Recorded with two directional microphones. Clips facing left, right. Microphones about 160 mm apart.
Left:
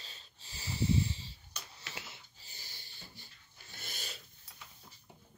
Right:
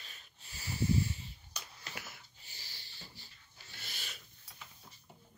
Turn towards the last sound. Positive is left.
turn(degrees=50)  # may be behind; listen again after turning